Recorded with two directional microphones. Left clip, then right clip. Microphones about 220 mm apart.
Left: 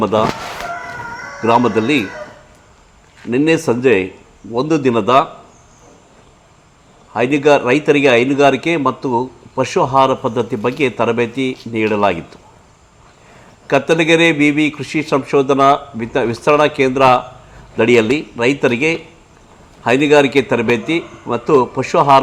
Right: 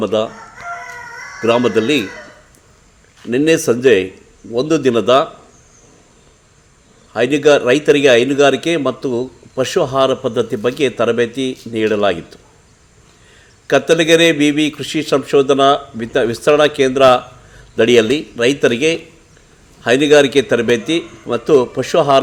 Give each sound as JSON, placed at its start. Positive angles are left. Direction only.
{"t": 0.0, "sound": "a man's voice", "side_deg": 20}
{"t": 1.4, "sound": "a man's voice", "side_deg": 20}
{"t": 3.2, "sound": "a man's voice", "side_deg": 20}
{"t": 7.1, "sound": "a man's voice", "side_deg": 20}
{"t": 13.7, "sound": "a man's voice", "side_deg": 20}